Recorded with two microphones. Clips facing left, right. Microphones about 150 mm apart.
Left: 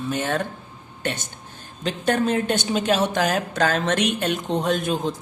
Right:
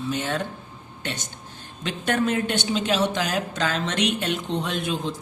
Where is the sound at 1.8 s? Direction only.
35° left (ahead or behind).